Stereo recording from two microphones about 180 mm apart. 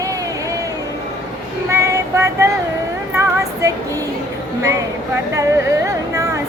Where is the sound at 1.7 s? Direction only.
15° right (ahead or behind).